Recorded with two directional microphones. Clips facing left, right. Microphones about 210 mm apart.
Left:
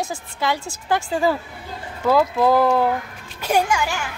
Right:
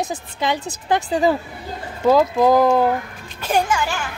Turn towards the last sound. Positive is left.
turn(degrees=10)  # may be behind; listen again after turning